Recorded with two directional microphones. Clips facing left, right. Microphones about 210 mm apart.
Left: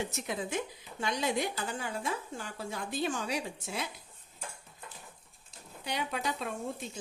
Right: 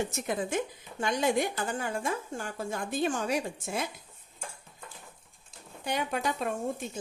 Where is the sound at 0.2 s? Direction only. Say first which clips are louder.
Right 4 dB; 50° right (ahead or behind).